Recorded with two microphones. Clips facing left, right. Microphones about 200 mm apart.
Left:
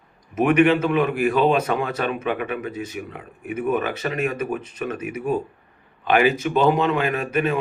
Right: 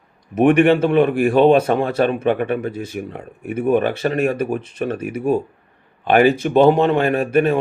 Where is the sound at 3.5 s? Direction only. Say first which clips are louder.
Right 6 dB; 30° right (ahead or behind).